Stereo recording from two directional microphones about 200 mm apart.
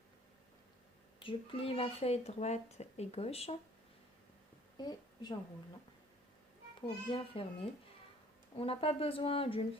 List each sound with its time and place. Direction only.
1.2 s speech: 25° left (ahead or behind)
4.8 s a woman's voice: 20° left (ahead or behind)
7.1 s speech: 25° left (ahead or behind)